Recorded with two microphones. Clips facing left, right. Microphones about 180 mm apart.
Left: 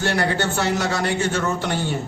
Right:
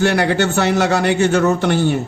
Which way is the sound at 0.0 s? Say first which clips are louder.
Right 6 dB; 70° right (ahead or behind).